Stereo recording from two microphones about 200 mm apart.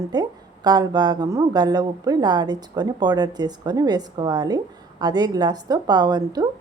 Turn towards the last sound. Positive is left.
turn(degrees=-20)  # may be behind; listen again after turning